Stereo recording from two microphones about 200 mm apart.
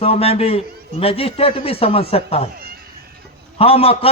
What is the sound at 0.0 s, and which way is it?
A man's voice, 30° left (ahead or behind).